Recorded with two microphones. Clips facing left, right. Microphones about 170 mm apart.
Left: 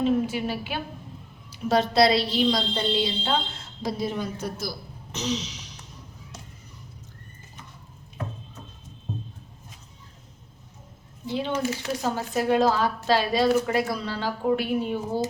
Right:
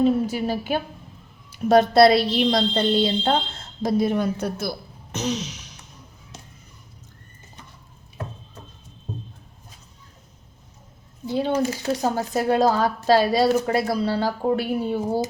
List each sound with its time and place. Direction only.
0.0 s a woman's voice: 40° right (ahead or behind)
11.3 s a woman's voice: 40° right (ahead or behind)